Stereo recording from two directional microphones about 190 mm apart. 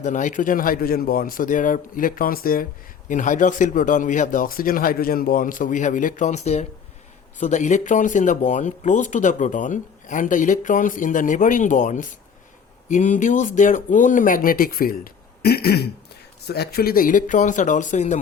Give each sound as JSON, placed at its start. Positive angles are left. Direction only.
{"t": 0.0, "sound": "speech", "side_deg": 40}